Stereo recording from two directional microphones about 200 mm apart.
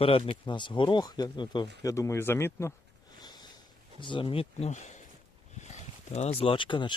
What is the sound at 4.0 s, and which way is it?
Speech, 25° left (ahead or behind).